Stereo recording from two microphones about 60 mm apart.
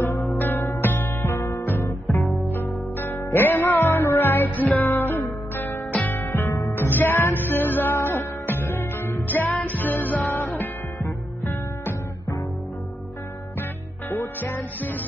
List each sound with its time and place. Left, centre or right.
0.4 s music: left
14.1 s music: left